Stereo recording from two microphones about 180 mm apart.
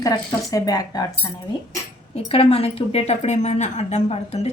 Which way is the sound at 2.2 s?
30° left (ahead or behind).